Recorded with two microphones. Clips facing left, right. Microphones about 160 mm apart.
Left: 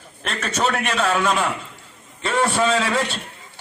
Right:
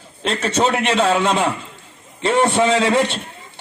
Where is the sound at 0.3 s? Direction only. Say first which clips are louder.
Right 5 dB; 25° right (ahead or behind).